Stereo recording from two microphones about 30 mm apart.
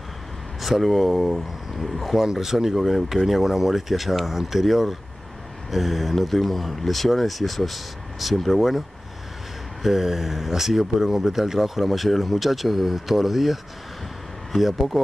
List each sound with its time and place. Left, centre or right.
0.6 s speech: centre
2.3 s speech: centre
9.8 s speech: centre
14.6 s speech: centre